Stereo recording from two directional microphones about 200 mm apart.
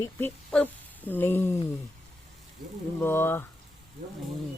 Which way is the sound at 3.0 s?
10° left (ahead or behind).